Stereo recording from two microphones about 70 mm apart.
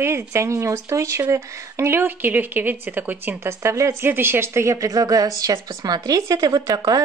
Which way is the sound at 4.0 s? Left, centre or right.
Right.